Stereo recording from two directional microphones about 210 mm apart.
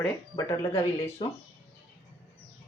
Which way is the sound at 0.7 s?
25° left (ahead or behind).